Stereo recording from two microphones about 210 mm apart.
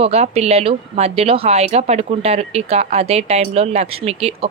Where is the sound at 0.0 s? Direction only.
30° right (ahead or behind).